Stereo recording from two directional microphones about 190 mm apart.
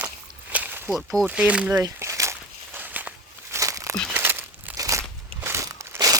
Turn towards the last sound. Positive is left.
turn(degrees=-15)  # may be behind; listen again after turning